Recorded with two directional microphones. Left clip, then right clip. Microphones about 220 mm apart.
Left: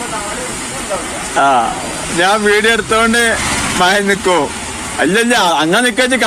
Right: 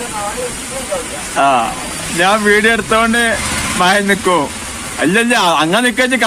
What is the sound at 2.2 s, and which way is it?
Speech, 25° right (ahead or behind).